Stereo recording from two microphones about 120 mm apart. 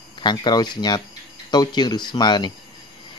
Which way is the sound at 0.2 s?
40° left (ahead or behind).